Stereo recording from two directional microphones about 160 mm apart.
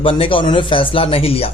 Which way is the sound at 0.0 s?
35° left (ahead or behind).